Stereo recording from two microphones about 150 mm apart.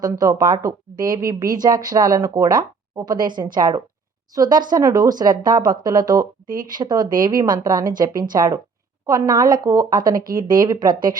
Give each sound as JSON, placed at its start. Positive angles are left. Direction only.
{"t": 0.0, "sound": "speech", "side_deg": -25}
{"t": 6.5, "sound": "speech", "side_deg": -65}
{"t": 6.7, "sound": "speech", "side_deg": -25}